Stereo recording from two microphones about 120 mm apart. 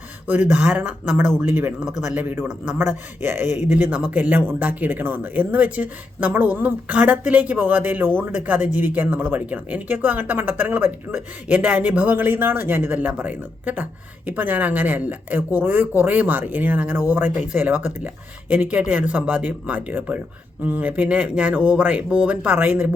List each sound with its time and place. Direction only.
0.3 s a man's voice: 15° right (ahead or behind)